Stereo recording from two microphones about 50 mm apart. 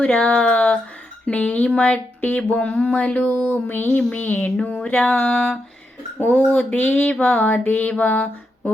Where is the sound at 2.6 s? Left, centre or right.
Centre.